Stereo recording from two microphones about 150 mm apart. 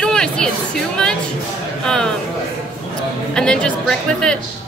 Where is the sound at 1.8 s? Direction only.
5° left (ahead or behind).